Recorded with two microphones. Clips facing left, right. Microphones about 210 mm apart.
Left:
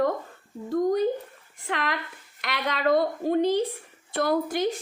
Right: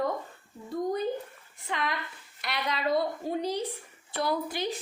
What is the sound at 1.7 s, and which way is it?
Speech, 75° left (ahead or behind).